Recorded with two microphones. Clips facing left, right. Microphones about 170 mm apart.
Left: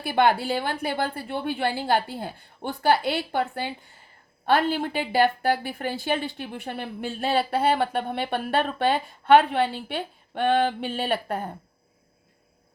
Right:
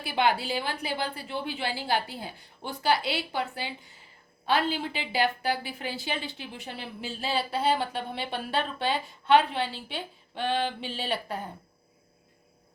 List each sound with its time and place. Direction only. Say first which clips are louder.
0.0 s a woman's voice: left 5 dB; 50° left (ahead or behind)